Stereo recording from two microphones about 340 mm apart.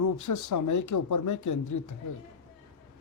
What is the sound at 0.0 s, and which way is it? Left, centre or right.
Speech, left.